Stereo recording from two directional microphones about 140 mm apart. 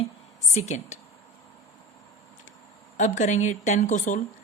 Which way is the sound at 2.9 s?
60° left (ahead or behind).